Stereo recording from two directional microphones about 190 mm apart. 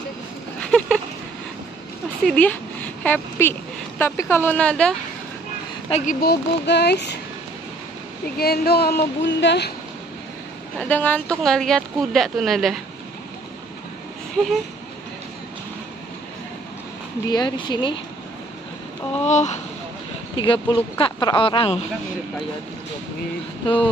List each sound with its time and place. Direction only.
0.6 s a sound: 5° left (ahead or behind)
2.2 s speech: 5° left (ahead or behind)
5.9 s speech: 35° left (ahead or behind)
6.2 s a woman's voice: 65° left (ahead or behind)
8.4 s a woman's voice: 55° left (ahead or behind)
10.8 s a woman's voice: 10° left (ahead or behind)
17.3 s speech: 20° left (ahead or behind)
19.2 s speech: 40° left (ahead or behind)
20.3 s speech: 25° left (ahead or behind)